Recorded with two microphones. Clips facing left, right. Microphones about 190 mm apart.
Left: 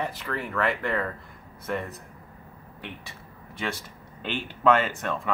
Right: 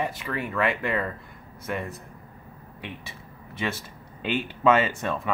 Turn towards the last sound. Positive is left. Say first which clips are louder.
# right 2 dB
turn(degrees=-15)  # may be behind; listen again after turning